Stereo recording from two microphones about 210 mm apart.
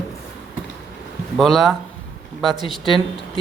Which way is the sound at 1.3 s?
Centre (ahead or behind).